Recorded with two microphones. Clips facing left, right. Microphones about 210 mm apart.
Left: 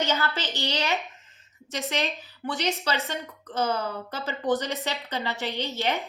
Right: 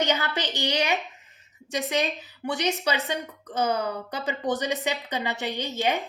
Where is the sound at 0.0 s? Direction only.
15° right (ahead or behind).